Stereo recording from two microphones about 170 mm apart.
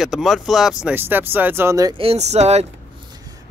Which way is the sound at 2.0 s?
35° right (ahead or behind).